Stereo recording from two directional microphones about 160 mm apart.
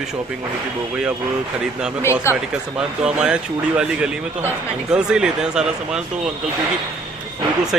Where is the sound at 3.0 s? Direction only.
5° right (ahead or behind).